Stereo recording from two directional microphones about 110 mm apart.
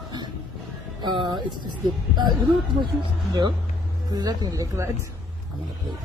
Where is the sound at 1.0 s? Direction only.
45° right (ahead or behind).